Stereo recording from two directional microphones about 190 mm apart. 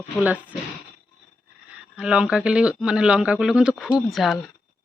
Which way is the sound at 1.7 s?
5° right (ahead or behind).